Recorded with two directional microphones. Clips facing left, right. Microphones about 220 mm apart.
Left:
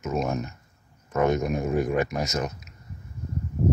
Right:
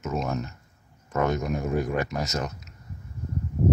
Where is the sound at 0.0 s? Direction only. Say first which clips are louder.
Left 2 dB; 15° left (ahead or behind).